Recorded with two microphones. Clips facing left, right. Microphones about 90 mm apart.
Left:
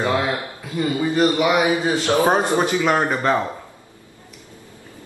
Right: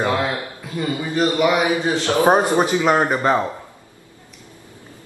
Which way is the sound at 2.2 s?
15° right (ahead or behind).